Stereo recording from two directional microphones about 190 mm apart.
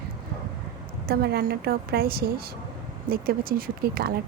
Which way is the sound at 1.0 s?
55° right (ahead or behind).